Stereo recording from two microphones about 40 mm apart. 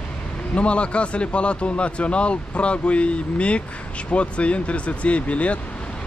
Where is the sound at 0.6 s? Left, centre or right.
Left.